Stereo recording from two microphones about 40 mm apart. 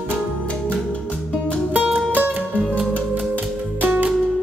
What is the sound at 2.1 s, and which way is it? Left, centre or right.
Music, right.